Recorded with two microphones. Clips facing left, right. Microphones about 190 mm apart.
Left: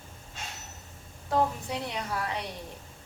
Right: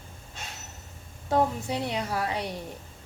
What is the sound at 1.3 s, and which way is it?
A woman's voice, 30° right (ahead or behind).